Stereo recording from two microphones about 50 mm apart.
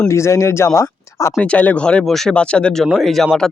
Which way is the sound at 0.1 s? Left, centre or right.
Left.